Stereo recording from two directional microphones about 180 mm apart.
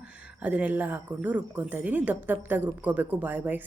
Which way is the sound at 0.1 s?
5° right (ahead or behind).